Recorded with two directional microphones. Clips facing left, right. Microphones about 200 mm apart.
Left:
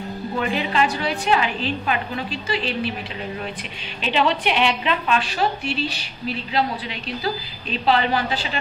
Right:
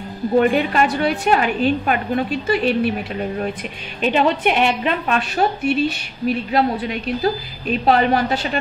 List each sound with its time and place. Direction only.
0.6 s a woman's voice: 55° right (ahead or behind)